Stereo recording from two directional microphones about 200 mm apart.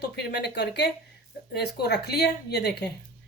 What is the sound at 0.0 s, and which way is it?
Speech, 55° left (ahead or behind).